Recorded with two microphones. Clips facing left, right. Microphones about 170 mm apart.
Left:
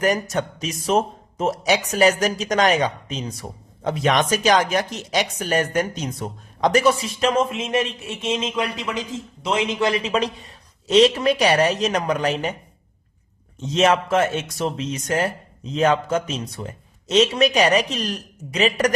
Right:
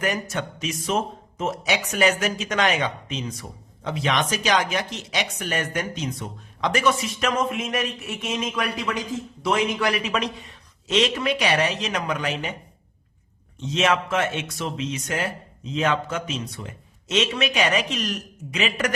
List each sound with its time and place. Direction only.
0.0 s speech: 40° left (ahead or behind)
13.6 s speech: 40° left (ahead or behind)